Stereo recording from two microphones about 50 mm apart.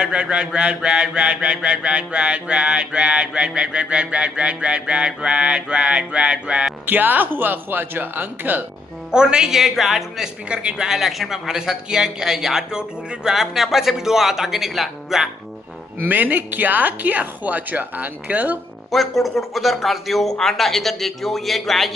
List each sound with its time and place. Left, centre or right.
0.0 s a sound: centre
6.9 s a woman's voice: right
9.1 s speech: centre
10.5 s a sound: right
10.9 s speech: centre
16.0 s a woman's voice: right
18.9 s a man's voice: centre